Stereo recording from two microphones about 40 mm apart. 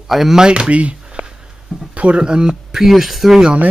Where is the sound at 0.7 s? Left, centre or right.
Right.